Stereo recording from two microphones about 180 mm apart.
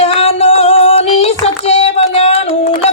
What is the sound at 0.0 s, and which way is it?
Child singing, 35° left (ahead or behind).